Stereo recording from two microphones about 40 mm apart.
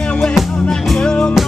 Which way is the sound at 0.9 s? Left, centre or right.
Left.